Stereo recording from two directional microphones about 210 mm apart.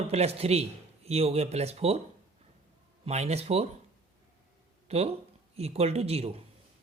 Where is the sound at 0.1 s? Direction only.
30° right (ahead or behind).